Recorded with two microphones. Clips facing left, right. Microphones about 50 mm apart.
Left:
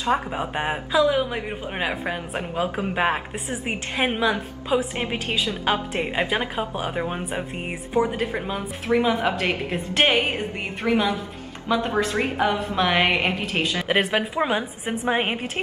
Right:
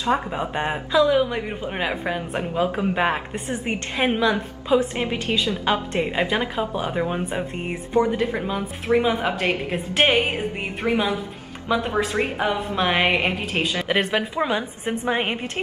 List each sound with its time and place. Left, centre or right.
0.1 s a woman's voice: centre
10.8 s a woman's voice: right
11.7 s a woman's voice: centre